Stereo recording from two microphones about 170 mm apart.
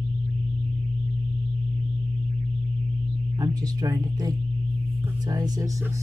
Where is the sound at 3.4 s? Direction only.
20° right (ahead or behind).